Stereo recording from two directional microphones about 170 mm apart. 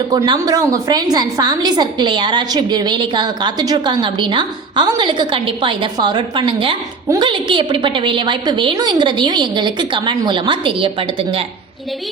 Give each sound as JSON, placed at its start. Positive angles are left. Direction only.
{"t": 0.1, "sound": "a woman's voice", "side_deg": -20}